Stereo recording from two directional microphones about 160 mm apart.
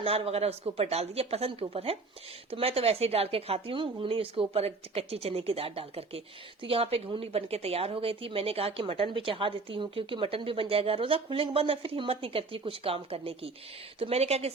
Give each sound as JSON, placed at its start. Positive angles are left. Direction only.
{"t": 0.0, "sound": "speech", "side_deg": -40}